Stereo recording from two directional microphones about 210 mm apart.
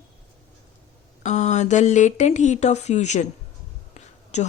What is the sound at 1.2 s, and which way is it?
A woman's voice, 35° left (ahead or behind).